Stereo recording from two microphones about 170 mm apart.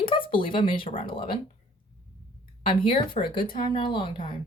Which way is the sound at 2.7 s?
30° left (ahead or behind).